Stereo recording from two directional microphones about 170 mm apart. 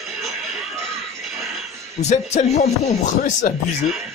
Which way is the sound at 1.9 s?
40° left (ahead or behind).